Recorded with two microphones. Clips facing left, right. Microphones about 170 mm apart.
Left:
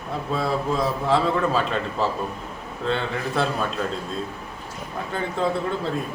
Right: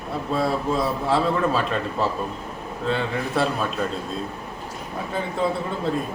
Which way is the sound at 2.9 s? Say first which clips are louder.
Even; 5° right (ahead or behind).